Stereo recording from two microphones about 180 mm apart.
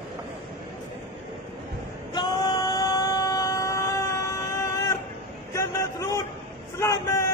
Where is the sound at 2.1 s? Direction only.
25° left (ahead or behind).